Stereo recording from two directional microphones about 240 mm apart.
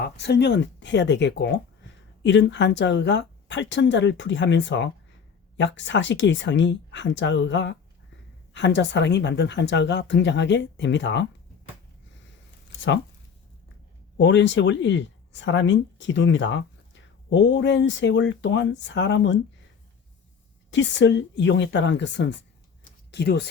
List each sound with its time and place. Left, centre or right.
0.0 s speech: left
14.2 s speech: left
20.7 s speech: left
22.8 s a sound: left